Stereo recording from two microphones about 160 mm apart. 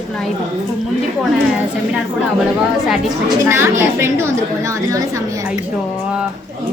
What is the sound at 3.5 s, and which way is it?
A woman's voice, 15° right (ahead or behind).